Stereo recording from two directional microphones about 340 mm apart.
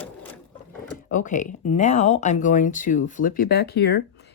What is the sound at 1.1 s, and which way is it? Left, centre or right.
Speech, left.